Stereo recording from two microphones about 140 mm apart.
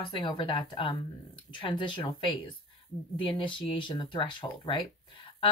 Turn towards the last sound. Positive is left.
turn(degrees=40)  # may be behind; listen again after turning